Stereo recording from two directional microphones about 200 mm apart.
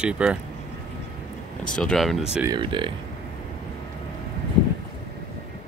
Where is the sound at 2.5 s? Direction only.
25° right (ahead or behind).